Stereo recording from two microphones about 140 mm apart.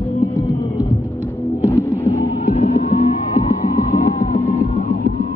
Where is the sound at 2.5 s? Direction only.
50° left (ahead or behind).